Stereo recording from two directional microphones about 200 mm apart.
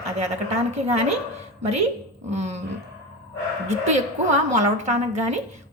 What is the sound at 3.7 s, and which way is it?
A woman's voice, 35° right (ahead or behind).